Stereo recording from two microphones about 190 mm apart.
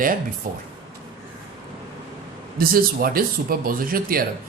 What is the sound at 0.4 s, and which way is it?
Speech, 45° right (ahead or behind).